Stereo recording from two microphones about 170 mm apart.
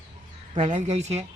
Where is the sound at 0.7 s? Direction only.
40° right (ahead or behind).